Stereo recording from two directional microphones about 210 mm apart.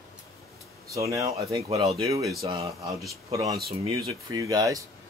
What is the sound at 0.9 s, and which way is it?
Speech, 15° right (ahead or behind).